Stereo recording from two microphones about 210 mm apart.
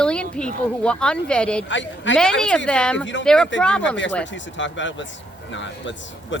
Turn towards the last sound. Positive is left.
turn(degrees=60)  # may be behind; listen again after turning